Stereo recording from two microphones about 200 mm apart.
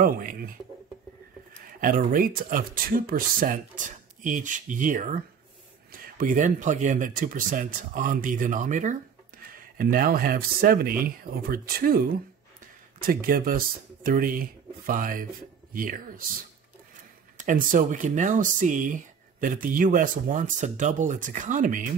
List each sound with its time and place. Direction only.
0.0 s speech: 40° right (ahead or behind)
1.8 s speech: 45° right (ahead or behind)
13.0 s speech: 45° right (ahead or behind)
17.4 s speech: 40° right (ahead or behind)